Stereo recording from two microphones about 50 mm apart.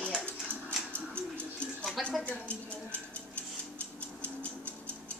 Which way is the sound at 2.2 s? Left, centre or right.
Left.